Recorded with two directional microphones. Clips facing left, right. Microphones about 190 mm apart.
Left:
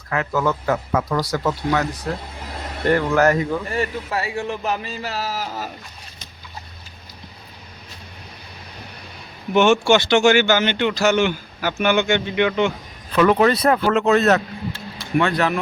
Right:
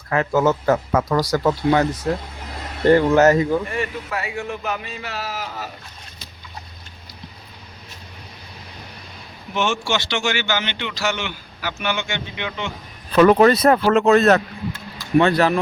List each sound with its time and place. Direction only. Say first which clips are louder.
0.1 s speech: right 3 dB; 30° right (ahead or behind)
0.6 s a man's voice: right 3 dB; 40° right (ahead or behind)
2.9 s speech: right 3 dB; 25° right (ahead or behind)
3.7 s speech: left 2 dB; 35° left (ahead or behind)
9.6 s speech: left 8 dB; 55° left (ahead or behind)
13.1 s speech: right 3 dB; 40° right (ahead or behind)
15.2 s a man's voice: right 3 dB; 35° right (ahead or behind)